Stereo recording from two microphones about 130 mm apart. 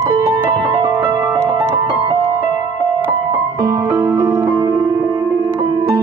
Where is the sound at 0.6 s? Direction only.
40° right (ahead or behind).